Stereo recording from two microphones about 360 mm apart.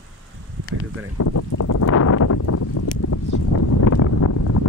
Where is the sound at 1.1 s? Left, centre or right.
Left.